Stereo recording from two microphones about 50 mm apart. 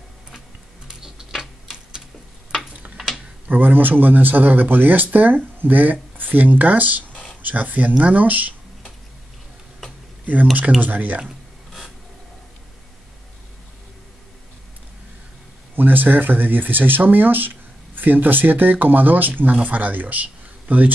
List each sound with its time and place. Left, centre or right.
0.8 s tick-tock: centre
3.4 s speech: right
7.1 s a sound: left
7.4 s speech: right
10.2 s speech: right
15.7 s speech: right